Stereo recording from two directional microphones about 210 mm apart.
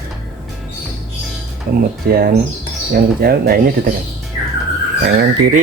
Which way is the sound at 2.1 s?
45° right (ahead or behind).